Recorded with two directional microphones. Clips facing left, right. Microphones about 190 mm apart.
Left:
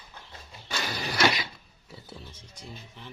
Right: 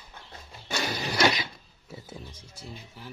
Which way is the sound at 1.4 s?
20° right (ahead or behind).